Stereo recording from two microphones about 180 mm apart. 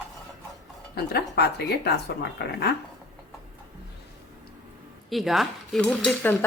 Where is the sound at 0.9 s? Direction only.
65° left (ahead or behind).